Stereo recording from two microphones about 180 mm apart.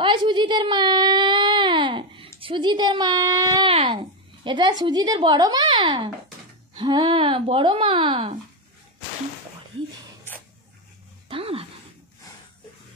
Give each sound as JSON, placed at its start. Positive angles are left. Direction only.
{"t": 0.0, "sound": "baby cry", "side_deg": -25}
{"t": 4.5, "sound": "speech", "side_deg": -25}
{"t": 11.2, "sound": "a sound", "side_deg": -30}